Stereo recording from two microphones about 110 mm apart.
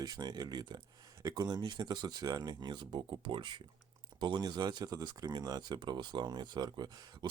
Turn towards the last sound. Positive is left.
turn(degrees=-40)  # may be behind; listen again after turning